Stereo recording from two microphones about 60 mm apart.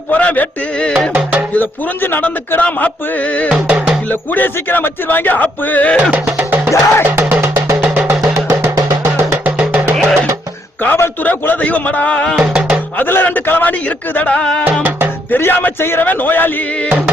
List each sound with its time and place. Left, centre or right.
0.1 s speech: left
1.5 s speech: left
3.5 s speech: right
4.1 s speech: left
6.0 s speech: right
6.7 s music: left
9.4 s music: right
10.8 s speech: left; by 12.4 s centre
12.4 s music: right
13.0 s speech: left; by 14.6 s centre
14.8 s music: right
15.3 s speech: left